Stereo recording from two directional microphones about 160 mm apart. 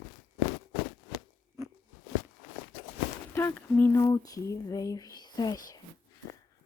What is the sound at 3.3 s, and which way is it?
Speech, 15° left (ahead or behind).